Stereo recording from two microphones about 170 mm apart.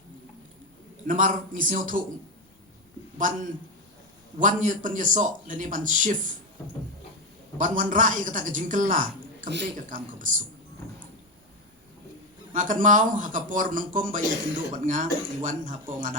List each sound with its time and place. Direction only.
1.0 s a man's voice: 50° right (ahead or behind)
3.2 s a man's voice: 50° right (ahead or behind)
7.6 s a man's voice: 50° right (ahead or behind)
12.5 s a man's voice: 50° right (ahead or behind)